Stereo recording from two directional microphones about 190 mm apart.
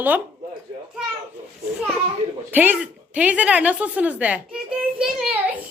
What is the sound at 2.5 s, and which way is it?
A woman's voice, 10° right (ahead or behind).